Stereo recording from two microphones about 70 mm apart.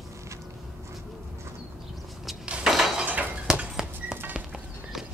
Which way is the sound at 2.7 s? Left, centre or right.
Centre.